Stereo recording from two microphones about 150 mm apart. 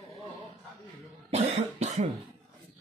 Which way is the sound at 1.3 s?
45° right (ahead or behind).